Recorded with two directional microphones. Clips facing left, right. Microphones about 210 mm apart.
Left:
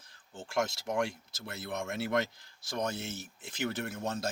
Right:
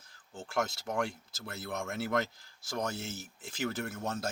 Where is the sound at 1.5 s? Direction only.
20° left (ahead or behind).